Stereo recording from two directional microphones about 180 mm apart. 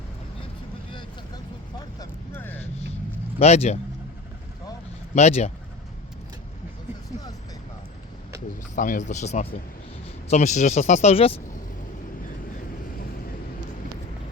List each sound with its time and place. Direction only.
2.0 s vehicle: 10° left (ahead or behind)
3.3 s speech: 35° left (ahead or behind)
5.1 s speech: 40° left (ahead or behind)
8.7 s speech: 45° left (ahead or behind)